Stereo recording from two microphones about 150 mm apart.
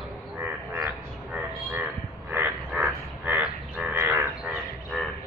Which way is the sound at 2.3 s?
10° right (ahead or behind).